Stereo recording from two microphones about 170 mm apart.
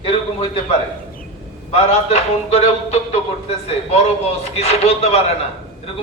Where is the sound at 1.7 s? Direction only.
35° left (ahead or behind).